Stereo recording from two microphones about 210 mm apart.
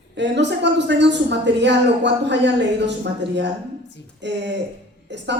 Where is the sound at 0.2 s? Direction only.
55° right (ahead or behind).